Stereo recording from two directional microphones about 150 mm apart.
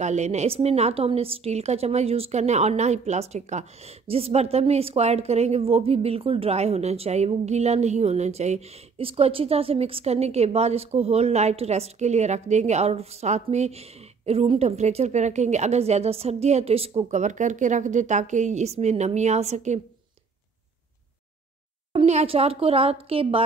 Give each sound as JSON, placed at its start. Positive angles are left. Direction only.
{"t": 0.0, "sound": "a woman's voice", "side_deg": -50}
{"t": 21.9, "sound": "a woman's voice", "side_deg": -45}